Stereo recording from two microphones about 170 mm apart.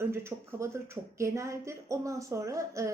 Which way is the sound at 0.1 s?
15° right (ahead or behind).